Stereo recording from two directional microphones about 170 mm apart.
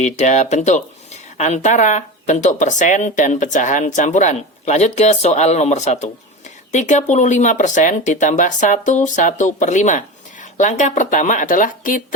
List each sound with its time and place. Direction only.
0.0 s speech: 40° left (ahead or behind)